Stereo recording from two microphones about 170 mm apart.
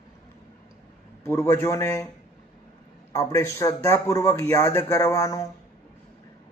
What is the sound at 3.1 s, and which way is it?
A man's voice, 20° left (ahead or behind).